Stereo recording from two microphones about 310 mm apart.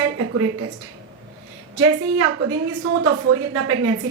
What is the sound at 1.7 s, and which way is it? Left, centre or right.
A woman's voice, right.